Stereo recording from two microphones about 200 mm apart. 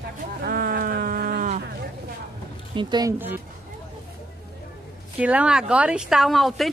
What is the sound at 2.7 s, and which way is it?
Speech, 20° right (ahead or behind).